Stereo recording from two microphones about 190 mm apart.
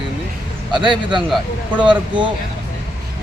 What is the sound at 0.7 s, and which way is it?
Speech, 25° right (ahead or behind).